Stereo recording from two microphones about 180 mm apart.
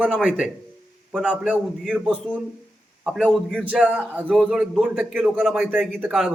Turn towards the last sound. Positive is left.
turn(degrees=-5)  # may be behind; listen again after turning